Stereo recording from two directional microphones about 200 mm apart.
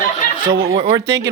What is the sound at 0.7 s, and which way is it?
Speech, 30° right (ahead or behind).